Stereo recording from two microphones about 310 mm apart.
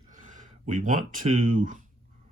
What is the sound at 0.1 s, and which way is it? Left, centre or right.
Speech, right.